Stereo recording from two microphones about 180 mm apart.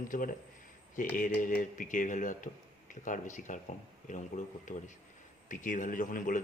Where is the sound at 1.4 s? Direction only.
45° left (ahead or behind).